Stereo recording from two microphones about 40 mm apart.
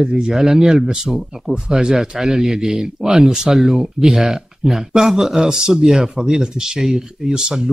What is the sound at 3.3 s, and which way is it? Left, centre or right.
Speech, centre.